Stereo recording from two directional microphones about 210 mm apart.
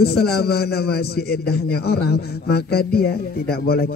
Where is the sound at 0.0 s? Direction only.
50° left (ahead or behind).